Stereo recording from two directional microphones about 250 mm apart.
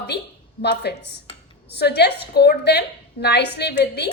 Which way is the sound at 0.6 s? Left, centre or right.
Left.